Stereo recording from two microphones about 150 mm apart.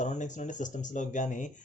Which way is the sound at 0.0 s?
55° left (ahead or behind).